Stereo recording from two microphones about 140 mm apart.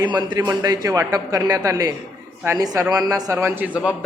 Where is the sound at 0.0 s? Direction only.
30° right (ahead or behind).